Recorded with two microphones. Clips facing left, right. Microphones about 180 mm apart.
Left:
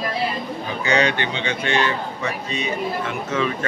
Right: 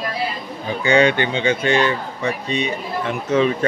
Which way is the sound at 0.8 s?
30° right (ahead or behind).